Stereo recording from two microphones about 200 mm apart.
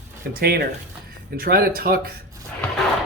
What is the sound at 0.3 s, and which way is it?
Speech, 50° right (ahead or behind).